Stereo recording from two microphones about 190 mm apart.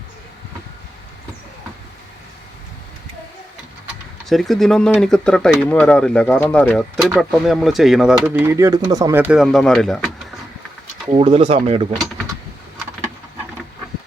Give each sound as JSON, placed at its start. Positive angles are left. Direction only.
{"t": 4.3, "sound": "speech", "side_deg": 0}
{"t": 11.1, "sound": "speech", "side_deg": -30}